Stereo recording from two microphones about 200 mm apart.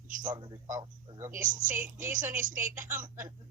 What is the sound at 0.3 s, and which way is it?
Speech, 20° right (ahead or behind).